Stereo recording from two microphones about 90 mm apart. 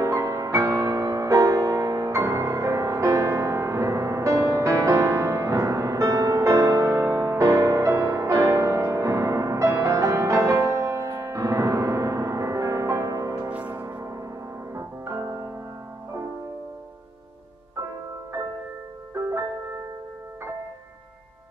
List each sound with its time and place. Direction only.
0.0 s music: 35° right (ahead or behind)
13.5 s music: 20° right (ahead or behind)
13.8 s church bell: 35° right (ahead or behind)
14.7 s music: 35° right (ahead or behind)